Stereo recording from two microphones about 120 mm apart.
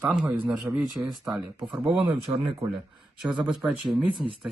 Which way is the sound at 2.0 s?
45° right (ahead or behind).